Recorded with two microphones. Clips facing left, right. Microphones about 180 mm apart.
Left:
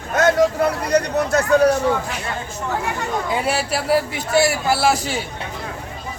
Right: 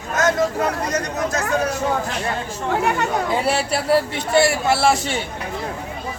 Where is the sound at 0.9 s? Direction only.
65° left (ahead or behind).